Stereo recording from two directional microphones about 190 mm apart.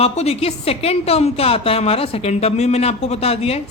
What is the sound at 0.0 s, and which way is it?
A woman's voice, 35° left (ahead or behind).